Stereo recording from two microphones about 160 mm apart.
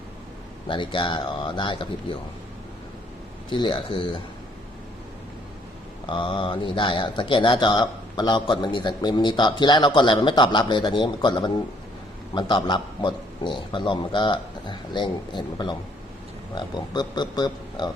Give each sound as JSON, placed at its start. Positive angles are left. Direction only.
{"t": 0.7, "sound": "speech", "side_deg": 30}
{"t": 3.5, "sound": "speech", "side_deg": 30}
{"t": 6.1, "sound": "speech", "side_deg": 30}